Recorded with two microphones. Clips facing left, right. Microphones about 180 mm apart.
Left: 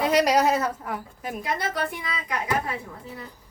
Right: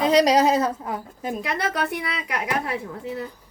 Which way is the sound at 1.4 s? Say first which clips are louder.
Right 1 dB; 80° right.